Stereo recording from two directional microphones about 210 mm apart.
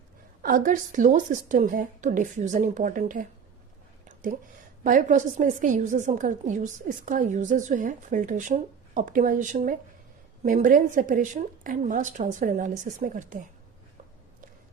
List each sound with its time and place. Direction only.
0.4 s a woman's voice: 40° right (ahead or behind)
4.8 s a woman's voice: 40° right (ahead or behind)